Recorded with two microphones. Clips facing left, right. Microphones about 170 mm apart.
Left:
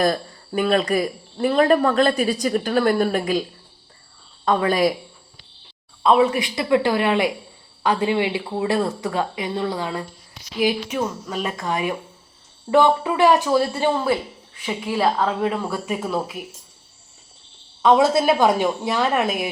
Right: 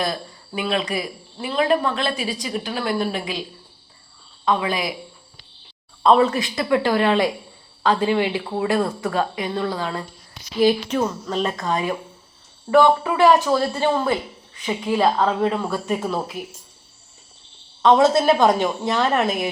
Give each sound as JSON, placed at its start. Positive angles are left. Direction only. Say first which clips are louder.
{"t": 0.0, "sound": "speech", "louder": "left 5 dB", "side_deg": 45}
{"t": 4.4, "sound": "speech", "louder": "left 4 dB", "side_deg": 45}
{"t": 6.0, "sound": "a woman's voice", "louder": "right 1 dB", "side_deg": 10}
{"t": 11.7, "sound": "a woman's voice", "louder": "right 1 dB", "side_deg": 15}
{"t": 17.8, "sound": "a woman's voice", "louder": "right 1 dB", "side_deg": 10}